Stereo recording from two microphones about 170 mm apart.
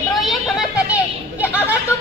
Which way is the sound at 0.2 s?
Centre (ahead or behind).